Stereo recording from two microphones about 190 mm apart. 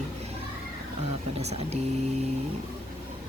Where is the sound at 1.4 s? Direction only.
35° right (ahead or behind).